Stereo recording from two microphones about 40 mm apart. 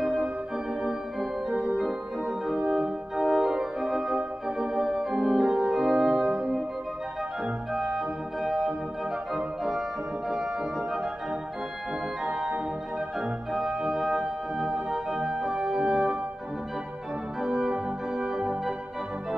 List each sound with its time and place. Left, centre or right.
0.0 s organ: centre
2.2 s organ: centre
3.3 s organ: centre
3.5 s organ: centre
7.7 s organ: centre
9.3 s organ: centre
13.2 s organ: centre
15.4 s organ: centre
17.4 s organ: centre